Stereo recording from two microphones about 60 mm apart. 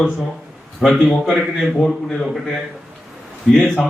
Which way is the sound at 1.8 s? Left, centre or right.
Centre.